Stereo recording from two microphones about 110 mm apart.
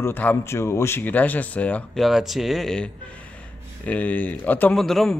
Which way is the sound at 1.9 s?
Centre (ahead or behind).